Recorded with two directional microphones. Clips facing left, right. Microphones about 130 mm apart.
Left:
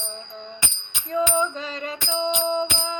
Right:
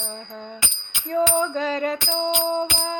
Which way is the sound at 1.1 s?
50° right (ahead or behind).